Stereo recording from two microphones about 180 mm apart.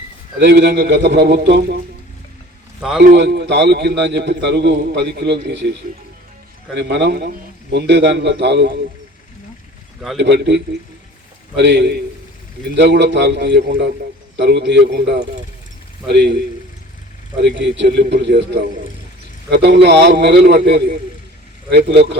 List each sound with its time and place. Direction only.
0.3 s a man's voice: 65° right (ahead or behind)
3.0 s a man's voice: 70° right (ahead or behind)
6.7 s a man's voice: 70° right (ahead or behind)
10.2 s a man's voice: 70° right (ahead or behind)
17.4 s a man's voice: 80° right